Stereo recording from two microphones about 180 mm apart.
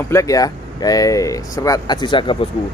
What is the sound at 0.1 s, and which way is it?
Speech, 20° left (ahead or behind).